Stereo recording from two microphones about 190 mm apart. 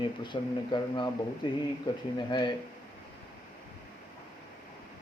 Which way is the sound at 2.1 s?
20° left (ahead or behind).